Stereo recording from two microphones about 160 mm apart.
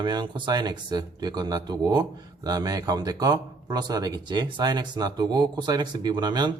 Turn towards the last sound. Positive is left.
turn(degrees=-25)  # may be behind; listen again after turning